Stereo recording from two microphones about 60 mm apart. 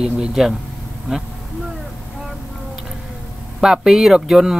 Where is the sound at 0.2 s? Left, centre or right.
Centre.